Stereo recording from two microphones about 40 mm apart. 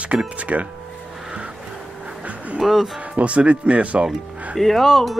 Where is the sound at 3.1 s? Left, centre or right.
Right.